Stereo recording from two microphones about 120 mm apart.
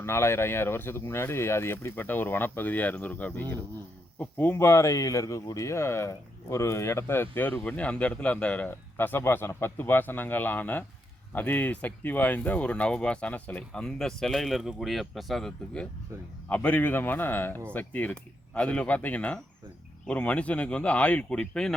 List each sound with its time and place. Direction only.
0.0 s speech: 20° left (ahead or behind)